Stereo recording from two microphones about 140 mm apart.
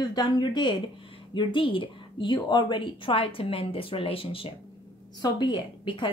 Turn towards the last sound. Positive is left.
turn(degrees=35)  # may be behind; listen again after turning